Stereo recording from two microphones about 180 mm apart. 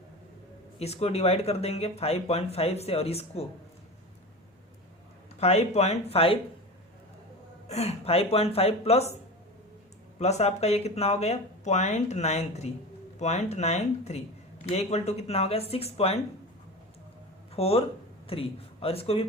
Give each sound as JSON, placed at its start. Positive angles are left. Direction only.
{"t": 0.8, "sound": "speech", "side_deg": 35}
{"t": 5.4, "sound": "speech", "side_deg": 35}
{"t": 7.7, "sound": "speech", "side_deg": 35}
{"t": 10.2, "sound": "speech", "side_deg": 40}
{"t": 17.5, "sound": "speech", "side_deg": 35}